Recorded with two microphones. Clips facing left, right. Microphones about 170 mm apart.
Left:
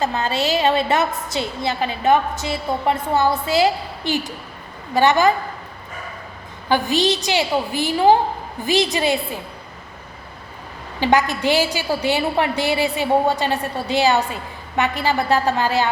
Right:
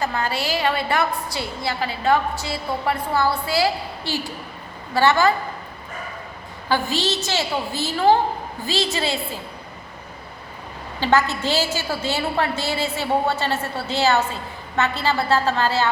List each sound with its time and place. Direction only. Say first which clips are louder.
0.0 s a woman's voice: left 3 dB; 20° left (ahead or behind)
6.7 s a woman's voice: left 4 dB; 15° left (ahead or behind)
11.0 s a woman's voice: left 2 dB; 15° left (ahead or behind)